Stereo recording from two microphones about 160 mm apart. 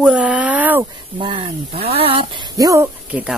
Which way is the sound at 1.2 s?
35° right (ahead or behind).